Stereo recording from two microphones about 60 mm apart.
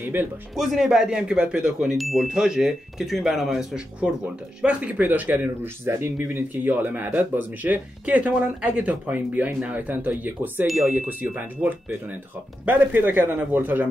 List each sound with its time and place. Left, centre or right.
0.0 s speech: right
0.6 s speech: centre
2.0 s speech: centre
2.2 s speech: centre
4.6 s speech: centre
5.4 s speech: right
6.1 s speech: right